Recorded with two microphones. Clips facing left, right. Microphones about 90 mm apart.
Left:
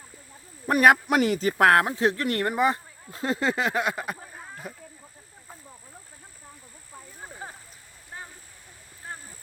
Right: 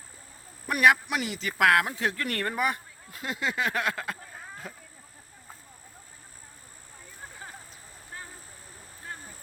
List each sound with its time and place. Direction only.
0.7 s speech: 40° left (ahead or behind)
1.5 s speech: 35° left (ahead or behind); by 4.8 s 10° left (ahead or behind)